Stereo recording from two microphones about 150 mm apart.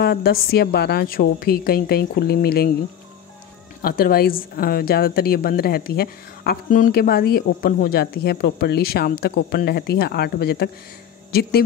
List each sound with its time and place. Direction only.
0.0 s a woman's voice: 90° left
3.8 s a woman's voice: 80° left